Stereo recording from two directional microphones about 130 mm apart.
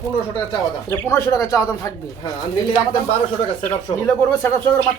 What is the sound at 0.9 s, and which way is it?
Speech, 25° left (ahead or behind).